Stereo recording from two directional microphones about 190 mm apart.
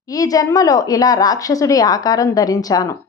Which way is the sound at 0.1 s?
20° left (ahead or behind).